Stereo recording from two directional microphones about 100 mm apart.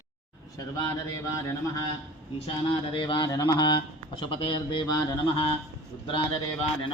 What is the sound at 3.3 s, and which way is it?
Speech, 45° left (ahead or behind).